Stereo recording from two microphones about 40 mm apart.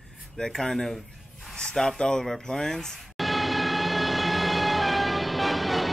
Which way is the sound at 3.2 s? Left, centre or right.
Centre.